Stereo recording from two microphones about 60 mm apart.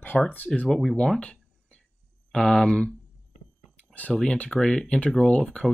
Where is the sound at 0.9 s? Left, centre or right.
Centre.